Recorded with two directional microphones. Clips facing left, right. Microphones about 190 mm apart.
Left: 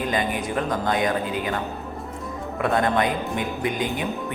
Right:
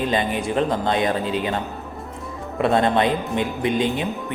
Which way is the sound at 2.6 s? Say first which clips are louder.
Right 3 dB; 25° right (ahead or behind).